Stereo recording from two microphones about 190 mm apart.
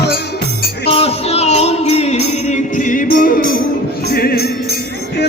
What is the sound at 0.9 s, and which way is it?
Music, 30° left (ahead or behind).